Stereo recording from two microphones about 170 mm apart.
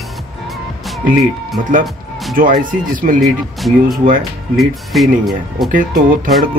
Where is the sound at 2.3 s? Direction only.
55° right (ahead or behind).